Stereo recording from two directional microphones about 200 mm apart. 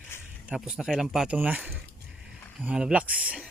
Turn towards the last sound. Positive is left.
turn(degrees=-5)  # may be behind; listen again after turning